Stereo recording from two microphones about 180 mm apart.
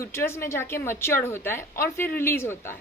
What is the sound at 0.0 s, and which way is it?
A woman's voice, 15° left (ahead or behind).